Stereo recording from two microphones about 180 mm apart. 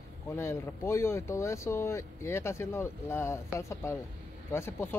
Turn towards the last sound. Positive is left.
turn(degrees=15)  # may be behind; listen again after turning